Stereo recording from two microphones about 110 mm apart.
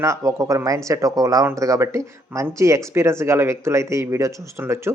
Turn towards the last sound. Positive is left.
turn(degrees=-25)  # may be behind; listen again after turning